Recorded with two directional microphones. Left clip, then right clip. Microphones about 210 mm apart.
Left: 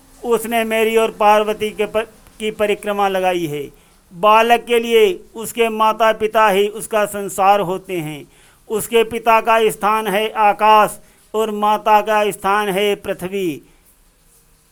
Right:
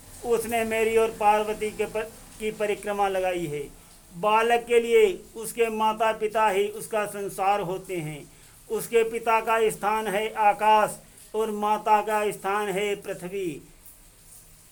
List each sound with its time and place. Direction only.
0.3 s speech: 25° left (ahead or behind)